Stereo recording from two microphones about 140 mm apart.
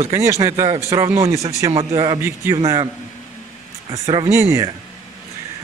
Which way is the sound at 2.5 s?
25° right (ahead or behind).